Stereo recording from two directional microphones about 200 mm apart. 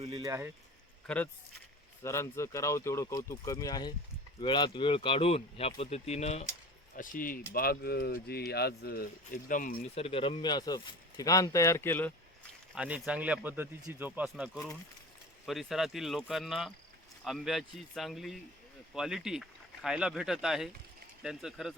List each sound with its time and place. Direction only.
0.2 s speech: 15° right (ahead or behind)
1.0 s speech: 5° left (ahead or behind)
12.7 s speech: 5° right (ahead or behind)